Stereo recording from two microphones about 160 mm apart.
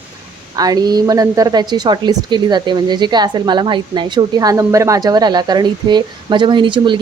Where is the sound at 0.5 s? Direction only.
25° right (ahead or behind).